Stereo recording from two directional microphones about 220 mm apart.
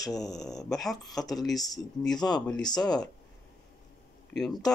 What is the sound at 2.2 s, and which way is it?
Speech, 20° left (ahead or behind).